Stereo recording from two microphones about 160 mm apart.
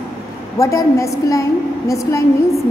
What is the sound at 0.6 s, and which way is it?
A woman's voice, 20° left (ahead or behind).